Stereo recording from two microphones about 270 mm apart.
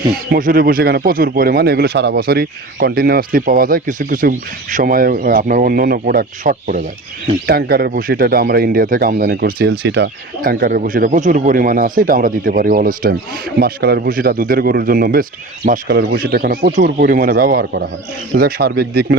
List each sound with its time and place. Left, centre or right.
0.3 s speech: right